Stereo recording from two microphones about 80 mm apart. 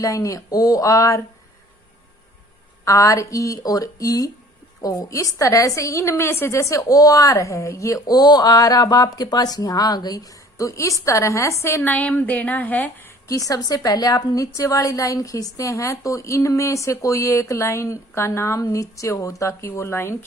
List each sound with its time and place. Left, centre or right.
0.0 s speech: left
2.8 s a woman's voice: left
13.2 s a woman's voice: left